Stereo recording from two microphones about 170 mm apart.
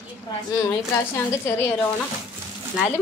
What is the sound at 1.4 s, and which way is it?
Speech, 15° left (ahead or behind).